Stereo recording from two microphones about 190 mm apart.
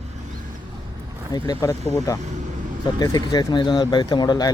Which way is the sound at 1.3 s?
20° left (ahead or behind).